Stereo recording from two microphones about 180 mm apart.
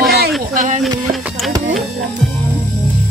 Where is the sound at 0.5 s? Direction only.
45° right (ahead or behind).